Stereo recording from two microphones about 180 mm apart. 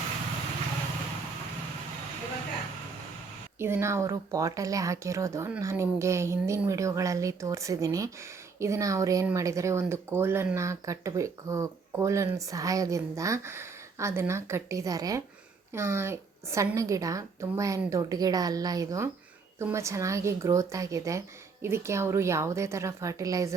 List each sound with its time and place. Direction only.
3.6 s speech: 15° right (ahead or behind)